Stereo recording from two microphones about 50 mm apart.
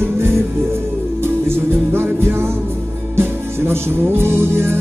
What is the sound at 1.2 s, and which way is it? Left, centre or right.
Music, right.